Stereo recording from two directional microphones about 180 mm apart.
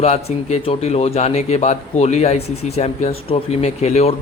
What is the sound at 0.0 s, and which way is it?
Speech, 35° left (ahead or behind).